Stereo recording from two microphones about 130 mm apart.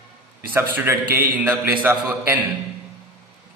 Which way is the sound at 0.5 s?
15° right (ahead or behind).